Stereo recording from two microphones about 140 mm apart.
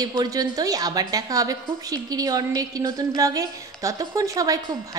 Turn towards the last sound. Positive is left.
turn(degrees=-25)  # may be behind; listen again after turning